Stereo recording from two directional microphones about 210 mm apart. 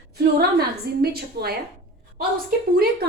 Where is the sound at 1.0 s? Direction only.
50° right (ahead or behind).